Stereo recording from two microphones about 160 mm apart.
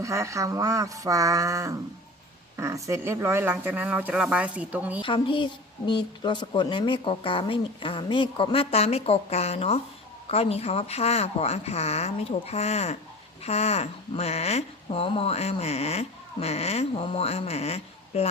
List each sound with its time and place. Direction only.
0.0 s speech: 20° right (ahead or behind)
5.0 s speech: 30° left (ahead or behind)